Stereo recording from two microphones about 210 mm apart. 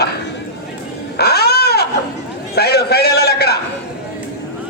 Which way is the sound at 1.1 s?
50° left (ahead or behind).